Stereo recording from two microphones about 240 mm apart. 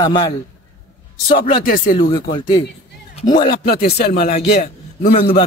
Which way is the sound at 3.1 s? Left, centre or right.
Left.